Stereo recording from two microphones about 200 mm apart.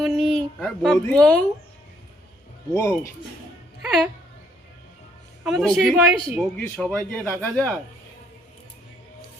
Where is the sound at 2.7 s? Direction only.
15° left (ahead or behind).